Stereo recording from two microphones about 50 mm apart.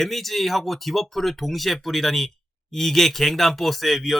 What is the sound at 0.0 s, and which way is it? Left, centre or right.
Speech, centre.